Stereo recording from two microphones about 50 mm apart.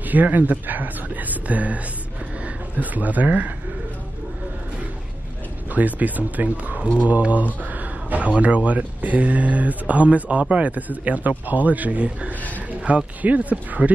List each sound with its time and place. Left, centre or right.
0.0 s a man's voice: right
5.7 s a man's voice: right
7.6 s a sound: right
8.4 s a man's voice: right